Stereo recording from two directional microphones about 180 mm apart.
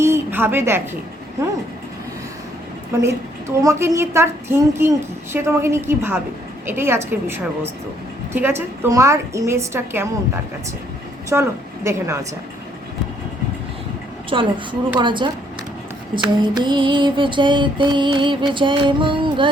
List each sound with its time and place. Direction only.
0.0 s a sound: 15° right (ahead or behind)
2.9 s a woman's voice: 15° right (ahead or behind)
11.3 s a woman's voice: 15° right (ahead or behind)
14.3 s music: 30° right (ahead or behind)
16.4 s music: 25° right (ahead or behind)